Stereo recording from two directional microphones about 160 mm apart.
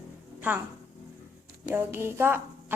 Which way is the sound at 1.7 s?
15° right (ahead or behind).